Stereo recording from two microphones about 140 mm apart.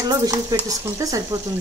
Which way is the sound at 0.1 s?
25° right (ahead or behind).